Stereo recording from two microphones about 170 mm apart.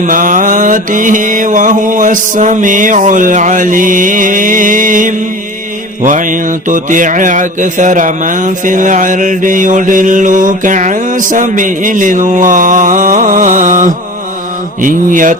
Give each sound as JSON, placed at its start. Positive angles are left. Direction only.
{"t": 0.0, "sound": "music", "side_deg": -50}